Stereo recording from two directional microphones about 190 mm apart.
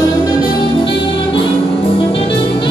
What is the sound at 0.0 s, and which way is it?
Music, 20° left (ahead or behind).